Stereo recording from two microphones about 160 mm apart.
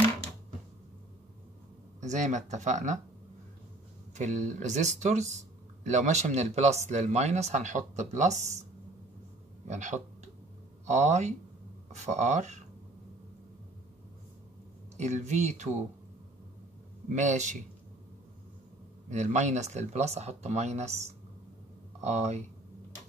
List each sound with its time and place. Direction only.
2.0 s speech: 50° right (ahead or behind)
4.1 s speech: 50° right (ahead or behind)
9.7 s speech: 50° right (ahead or behind)
15.0 s speech: 45° right (ahead or behind)
17.1 s speech: 50° right (ahead or behind)
19.0 s speech: 50° right (ahead or behind)
22.0 s speech: 45° right (ahead or behind)